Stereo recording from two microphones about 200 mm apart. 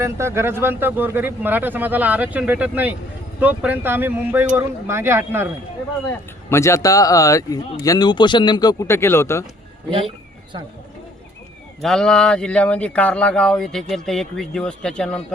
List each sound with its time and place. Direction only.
0.0 s speech: 15° right (ahead or behind)
6.5 s speech: 15° left (ahead or behind)
11.8 s speech: centre (ahead or behind)